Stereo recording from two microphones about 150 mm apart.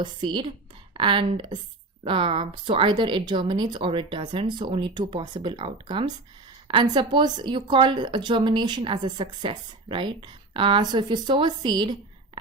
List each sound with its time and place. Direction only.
0.0 s a woman's voice: 30° right (ahead or behind)